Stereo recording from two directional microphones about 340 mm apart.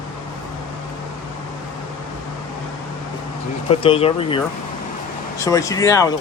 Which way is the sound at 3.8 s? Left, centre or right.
Centre.